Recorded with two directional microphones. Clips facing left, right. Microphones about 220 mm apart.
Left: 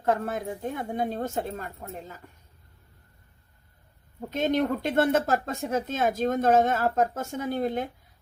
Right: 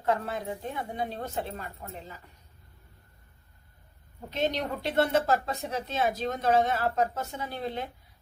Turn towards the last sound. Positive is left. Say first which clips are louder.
# left 6 dB
turn(degrees=45)  # may be behind; listen again after turning